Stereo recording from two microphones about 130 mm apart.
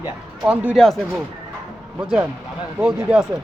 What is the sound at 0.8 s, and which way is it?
A man's voice, centre (ahead or behind).